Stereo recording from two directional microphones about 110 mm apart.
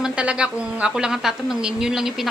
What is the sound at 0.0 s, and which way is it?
A woman's voice, 10° right (ahead or behind).